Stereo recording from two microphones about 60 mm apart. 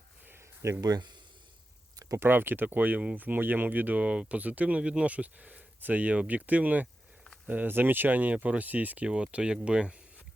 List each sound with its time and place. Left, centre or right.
0.3 s a sound: right
0.8 s speech: right
2.1 s speech: right
9.0 s speech: centre